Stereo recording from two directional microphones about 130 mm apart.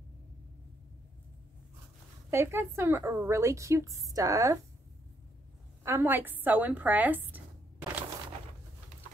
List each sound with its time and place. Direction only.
2.3 s a woman's voice: 20° right (ahead or behind)
5.9 s speech: 20° right (ahead or behind)